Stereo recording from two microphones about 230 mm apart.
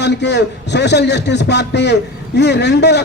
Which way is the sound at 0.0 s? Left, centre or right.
Left.